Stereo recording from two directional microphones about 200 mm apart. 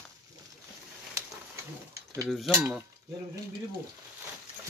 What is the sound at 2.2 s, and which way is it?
Mechanisms, centre (ahead or behind).